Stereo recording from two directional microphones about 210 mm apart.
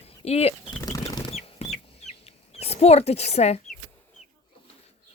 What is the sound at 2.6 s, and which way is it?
Speech, 30° left (ahead or behind).